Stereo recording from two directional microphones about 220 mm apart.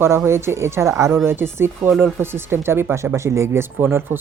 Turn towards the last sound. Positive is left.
turn(degrees=-10)  # may be behind; listen again after turning